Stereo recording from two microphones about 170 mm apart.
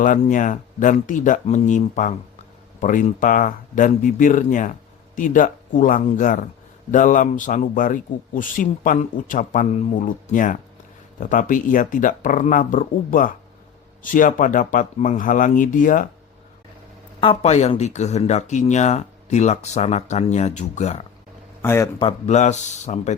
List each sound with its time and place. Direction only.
0.0 s a man's voice: 50° left (ahead or behind)
17.2 s speech: 35° left (ahead or behind)
21.6 s a man's voice: 15° left (ahead or behind)
21.9 s a man's voice: 35° left (ahead or behind)